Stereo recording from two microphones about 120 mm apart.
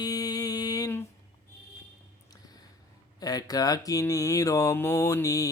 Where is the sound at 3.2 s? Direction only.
30° left (ahead or behind).